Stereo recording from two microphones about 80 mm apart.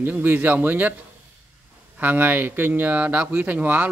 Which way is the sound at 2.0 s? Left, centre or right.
Right.